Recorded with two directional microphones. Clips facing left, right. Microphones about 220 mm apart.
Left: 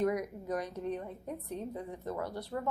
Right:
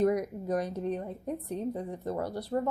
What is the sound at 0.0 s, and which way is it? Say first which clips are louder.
A woman's voice: right 5 dB; 35° right (ahead or behind).